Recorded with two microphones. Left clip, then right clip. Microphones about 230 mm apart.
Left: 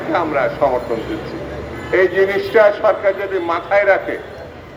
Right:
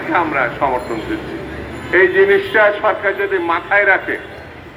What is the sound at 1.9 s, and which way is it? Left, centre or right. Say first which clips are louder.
A man's voice: right 3 dB; left.